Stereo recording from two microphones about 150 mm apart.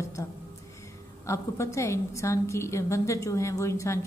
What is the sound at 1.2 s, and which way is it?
A woman's voice, 20° left (ahead or behind).